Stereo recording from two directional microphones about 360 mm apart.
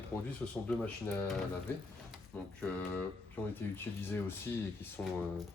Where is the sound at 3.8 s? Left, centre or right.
Centre.